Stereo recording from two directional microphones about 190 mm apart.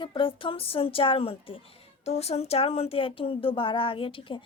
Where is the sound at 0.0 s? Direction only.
25° left (ahead or behind).